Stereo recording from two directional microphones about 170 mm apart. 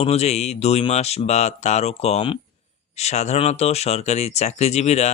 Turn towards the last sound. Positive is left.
turn(degrees=40)  # may be behind; listen again after turning